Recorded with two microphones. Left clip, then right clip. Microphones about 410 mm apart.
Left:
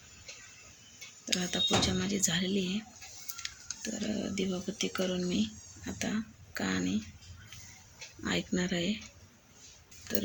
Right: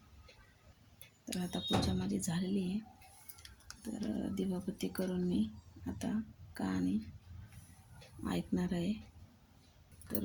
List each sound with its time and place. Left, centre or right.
1.2 s speech: right
3.8 s speech: right
8.2 s speech: right